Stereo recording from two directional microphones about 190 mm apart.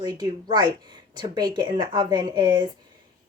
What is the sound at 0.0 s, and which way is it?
Speech, 20° right (ahead or behind).